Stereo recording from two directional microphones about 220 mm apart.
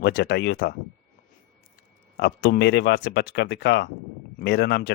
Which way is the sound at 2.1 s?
50° left (ahead or behind).